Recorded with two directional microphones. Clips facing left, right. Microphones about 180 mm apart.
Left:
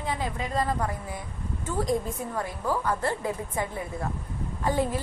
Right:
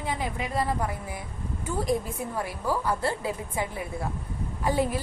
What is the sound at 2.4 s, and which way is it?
A woman's voice, 10° right (ahead or behind).